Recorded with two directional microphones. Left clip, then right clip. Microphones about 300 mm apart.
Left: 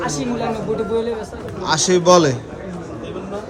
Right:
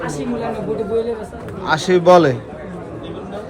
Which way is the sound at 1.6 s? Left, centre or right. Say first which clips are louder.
Right 2 dB; centre.